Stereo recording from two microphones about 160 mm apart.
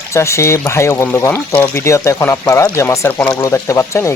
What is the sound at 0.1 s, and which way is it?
Speech, 15° left (ahead or behind).